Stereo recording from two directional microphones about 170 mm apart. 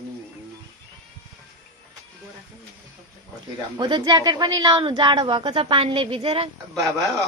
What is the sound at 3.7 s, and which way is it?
A woman's voice, 25° right (ahead or behind).